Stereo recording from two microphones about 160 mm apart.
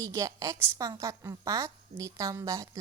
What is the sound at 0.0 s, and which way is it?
A woman's voice, 20° right (ahead or behind).